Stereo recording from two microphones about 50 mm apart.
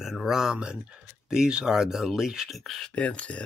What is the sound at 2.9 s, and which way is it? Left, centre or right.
Speech, left.